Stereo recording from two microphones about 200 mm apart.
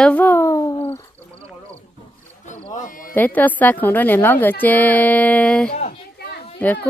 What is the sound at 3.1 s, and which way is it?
Speech, 10° left (ahead or behind).